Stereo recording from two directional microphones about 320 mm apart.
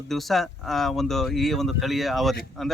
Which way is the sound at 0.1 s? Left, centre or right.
Centre.